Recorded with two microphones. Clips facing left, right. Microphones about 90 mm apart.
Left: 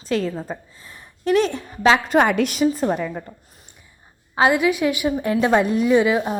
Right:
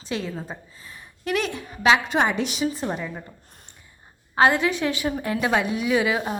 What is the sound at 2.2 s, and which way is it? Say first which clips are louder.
Speech: left 6 dB; 50° left (ahead or behind).